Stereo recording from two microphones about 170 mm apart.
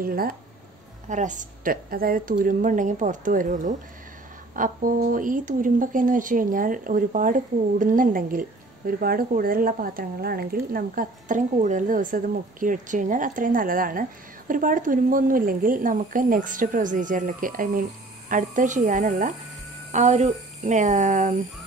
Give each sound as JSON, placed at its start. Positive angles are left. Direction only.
{"t": 0.0, "sound": "speech", "side_deg": -60}
{"t": 1.0, "sound": "speech", "side_deg": -45}